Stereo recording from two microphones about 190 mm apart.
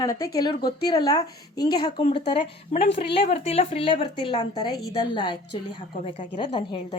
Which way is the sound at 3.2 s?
35° left (ahead or behind).